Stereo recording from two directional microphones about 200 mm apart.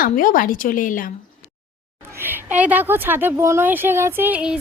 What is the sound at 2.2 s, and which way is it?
Speech, 10° right (ahead or behind).